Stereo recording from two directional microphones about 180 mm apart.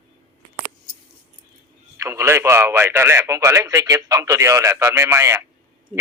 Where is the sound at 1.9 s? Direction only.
15° right (ahead or behind).